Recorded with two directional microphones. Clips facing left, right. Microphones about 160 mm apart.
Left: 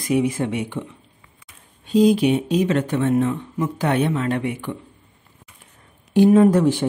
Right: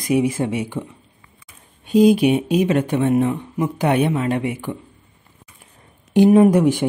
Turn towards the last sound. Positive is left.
turn(degrees=-15)  # may be behind; listen again after turning